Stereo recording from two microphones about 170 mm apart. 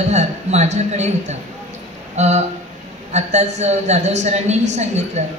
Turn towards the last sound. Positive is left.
turn(degrees=-40)  # may be behind; listen again after turning